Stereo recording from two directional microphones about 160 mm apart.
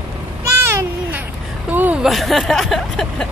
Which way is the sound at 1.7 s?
10° right (ahead or behind).